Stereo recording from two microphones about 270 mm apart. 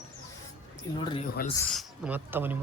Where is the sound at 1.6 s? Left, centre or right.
Centre.